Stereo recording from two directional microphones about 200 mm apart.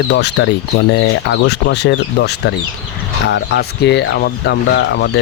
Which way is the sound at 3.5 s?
60° left (ahead or behind).